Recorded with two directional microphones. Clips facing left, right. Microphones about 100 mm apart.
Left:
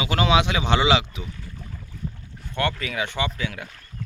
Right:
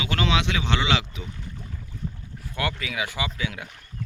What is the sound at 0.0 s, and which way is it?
Speech, 15° left (ahead or behind).